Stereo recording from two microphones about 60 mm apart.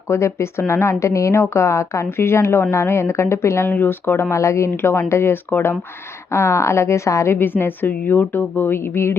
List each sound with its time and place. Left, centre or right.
0.1 s a woman's voice: left
3.7 s a woman's voice: left
6.3 s a woman's voice: left
7.6 s speech: left